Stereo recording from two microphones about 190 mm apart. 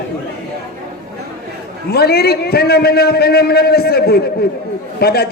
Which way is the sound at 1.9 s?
55° left (ahead or behind).